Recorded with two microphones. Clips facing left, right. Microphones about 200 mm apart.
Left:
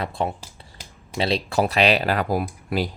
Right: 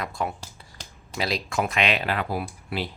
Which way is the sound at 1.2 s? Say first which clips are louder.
Left 5 dB; 30° left (ahead or behind).